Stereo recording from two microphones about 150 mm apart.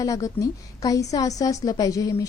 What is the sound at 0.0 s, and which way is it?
A woman's voice, 20° left (ahead or behind).